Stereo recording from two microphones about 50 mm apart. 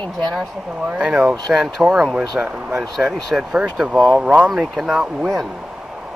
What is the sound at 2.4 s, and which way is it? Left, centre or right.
Speech, right.